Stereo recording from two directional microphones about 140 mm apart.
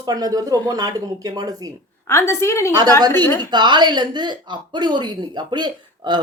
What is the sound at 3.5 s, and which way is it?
A woman's voice, 30° right (ahead or behind).